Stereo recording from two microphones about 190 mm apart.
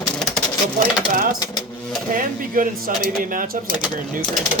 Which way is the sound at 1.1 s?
45° right (ahead or behind).